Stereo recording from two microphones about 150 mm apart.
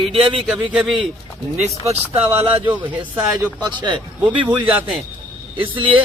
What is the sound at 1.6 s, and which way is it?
Speech, 45° right (ahead or behind).